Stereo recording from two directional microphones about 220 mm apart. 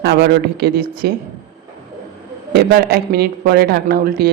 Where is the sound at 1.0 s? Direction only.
45° right (ahead or behind).